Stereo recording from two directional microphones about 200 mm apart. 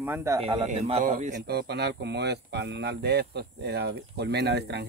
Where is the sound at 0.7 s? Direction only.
30° right (ahead or behind).